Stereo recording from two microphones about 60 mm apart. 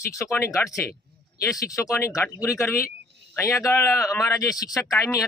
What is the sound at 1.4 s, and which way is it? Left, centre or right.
Speech, left.